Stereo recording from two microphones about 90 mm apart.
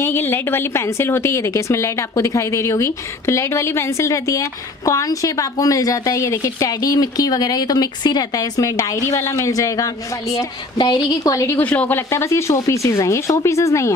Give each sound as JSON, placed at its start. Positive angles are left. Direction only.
{"t": 0.0, "sound": "a woman's voice", "side_deg": 25}
{"t": 10.8, "sound": "a woman's voice", "side_deg": 55}
{"t": 11.5, "sound": "speech", "side_deg": 15}
{"t": 12.1, "sound": "a woman's voice", "side_deg": 30}